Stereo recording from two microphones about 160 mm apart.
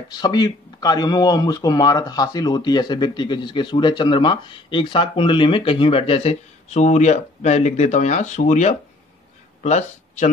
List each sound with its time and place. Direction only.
0.1 s speech: 25° left (ahead or behind); by 10.3 s 45° left (ahead or behind)